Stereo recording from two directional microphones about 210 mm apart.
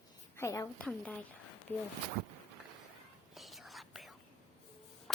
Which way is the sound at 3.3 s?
Centre (ahead or behind).